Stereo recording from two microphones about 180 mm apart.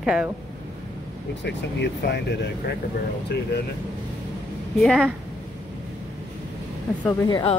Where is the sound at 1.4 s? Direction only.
75° left (ahead or behind).